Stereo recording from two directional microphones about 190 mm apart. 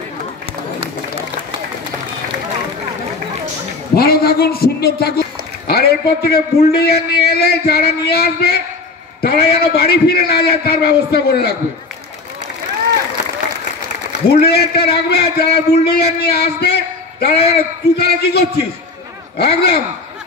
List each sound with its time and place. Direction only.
3.9 s a man's voice: 55° left (ahead or behind)
14.3 s a man's voice: 55° left (ahead or behind)